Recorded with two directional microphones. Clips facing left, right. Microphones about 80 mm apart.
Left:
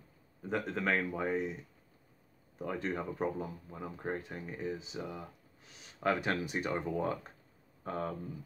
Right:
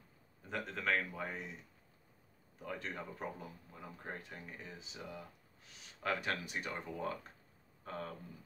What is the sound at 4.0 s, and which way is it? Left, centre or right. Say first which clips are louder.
Speech: left 9 dB; left.